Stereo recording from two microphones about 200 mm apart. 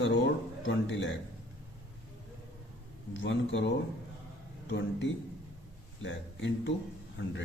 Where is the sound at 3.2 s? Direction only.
65° left (ahead or behind).